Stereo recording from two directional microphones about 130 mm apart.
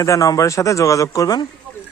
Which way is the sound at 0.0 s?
25° left (ahead or behind).